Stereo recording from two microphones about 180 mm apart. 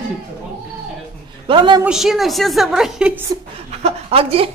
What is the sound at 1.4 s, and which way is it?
Speech, 25° right (ahead or behind).